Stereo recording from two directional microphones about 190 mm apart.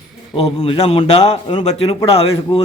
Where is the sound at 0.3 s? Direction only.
30° left (ahead or behind).